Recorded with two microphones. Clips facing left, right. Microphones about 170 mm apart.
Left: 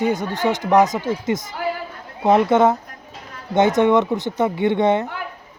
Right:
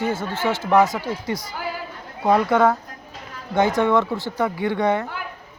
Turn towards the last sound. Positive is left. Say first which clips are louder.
# left 4 dB
turn(degrees=20)  # may be behind; listen again after turning